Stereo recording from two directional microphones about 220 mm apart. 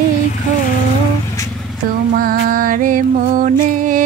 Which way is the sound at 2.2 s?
40° right (ahead or behind).